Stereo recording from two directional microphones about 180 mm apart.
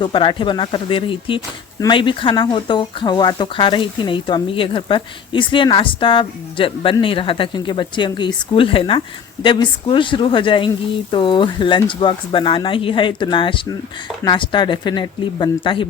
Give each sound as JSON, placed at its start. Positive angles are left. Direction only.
{"t": 0.0, "sound": "speech", "side_deg": 25}